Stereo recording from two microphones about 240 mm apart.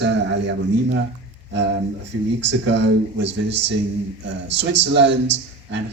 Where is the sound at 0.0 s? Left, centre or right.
Right.